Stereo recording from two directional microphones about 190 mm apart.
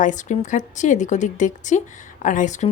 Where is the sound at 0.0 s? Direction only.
40° left (ahead or behind).